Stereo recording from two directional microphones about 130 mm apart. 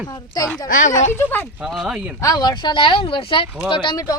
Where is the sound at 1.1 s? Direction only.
15° left (ahead or behind).